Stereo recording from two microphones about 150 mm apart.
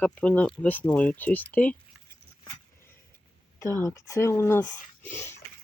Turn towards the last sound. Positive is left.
turn(degrees=15)  # may be behind; listen again after turning